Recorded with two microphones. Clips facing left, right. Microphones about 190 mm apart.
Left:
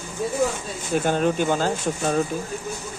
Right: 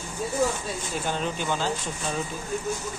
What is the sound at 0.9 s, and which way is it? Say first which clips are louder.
Speech: left 10 dB; 55° left (ahead or behind).